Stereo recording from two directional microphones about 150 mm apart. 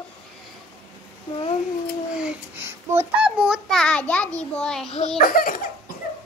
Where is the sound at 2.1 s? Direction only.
10° right (ahead or behind).